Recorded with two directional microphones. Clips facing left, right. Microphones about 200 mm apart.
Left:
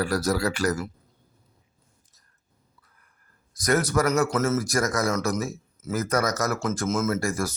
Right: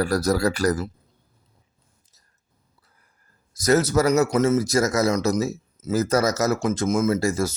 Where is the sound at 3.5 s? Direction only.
25° right (ahead or behind).